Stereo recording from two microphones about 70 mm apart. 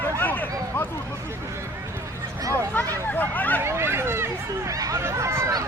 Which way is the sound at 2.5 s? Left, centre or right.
Left.